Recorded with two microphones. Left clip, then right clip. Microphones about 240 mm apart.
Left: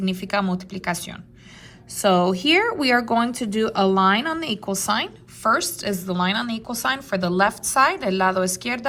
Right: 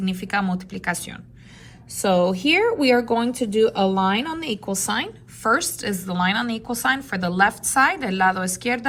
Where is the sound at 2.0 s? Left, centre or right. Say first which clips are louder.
Left 1 dB; left.